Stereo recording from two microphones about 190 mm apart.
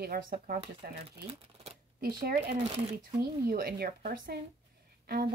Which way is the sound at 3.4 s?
55° right (ahead or behind).